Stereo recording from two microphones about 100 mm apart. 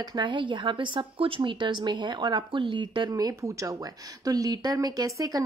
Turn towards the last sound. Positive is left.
turn(degrees=-35)  # may be behind; listen again after turning